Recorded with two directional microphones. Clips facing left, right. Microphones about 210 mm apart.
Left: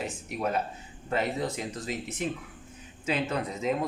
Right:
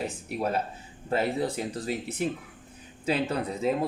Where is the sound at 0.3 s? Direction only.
30° right (ahead or behind).